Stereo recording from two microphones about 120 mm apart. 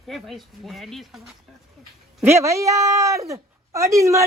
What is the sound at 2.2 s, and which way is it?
Speech, 25° right (ahead or behind).